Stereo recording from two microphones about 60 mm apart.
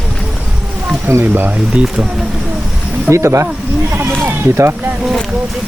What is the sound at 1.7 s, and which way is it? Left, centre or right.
Speech, centre.